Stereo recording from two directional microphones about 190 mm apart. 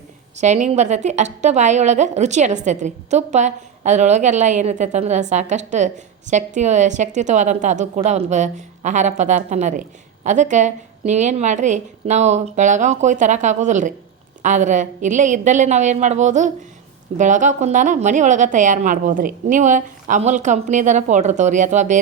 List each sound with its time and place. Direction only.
0.3 s a woman's voice: 40° right (ahead or behind)